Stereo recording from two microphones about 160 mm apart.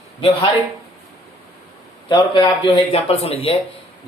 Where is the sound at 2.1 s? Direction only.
30° left (ahead or behind).